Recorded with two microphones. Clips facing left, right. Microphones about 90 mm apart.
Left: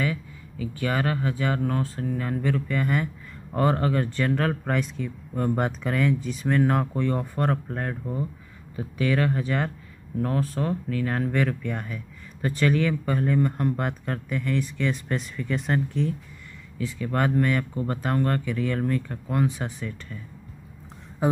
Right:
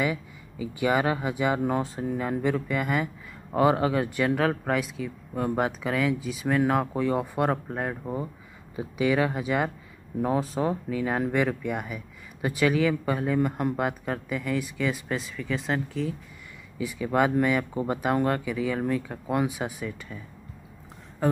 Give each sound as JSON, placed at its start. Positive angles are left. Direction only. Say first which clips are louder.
{"t": 0.0, "sound": "speech", "louder": "right 1 dB", "side_deg": -15}
{"t": 8.0, "sound": "speech", "louder": "left 1 dB", "side_deg": -25}
{"t": 8.7, "sound": "speech", "louder": "right 1 dB", "side_deg": -15}
{"t": 21.2, "sound": "a sound", "louder": "left 1 dB", "side_deg": 10}